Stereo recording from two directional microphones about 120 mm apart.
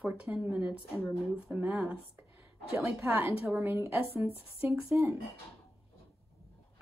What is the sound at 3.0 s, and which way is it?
A woman's voice, 20° right (ahead or behind).